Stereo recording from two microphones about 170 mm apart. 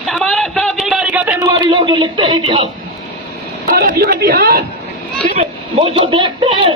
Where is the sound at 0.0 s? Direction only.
Centre (ahead or behind).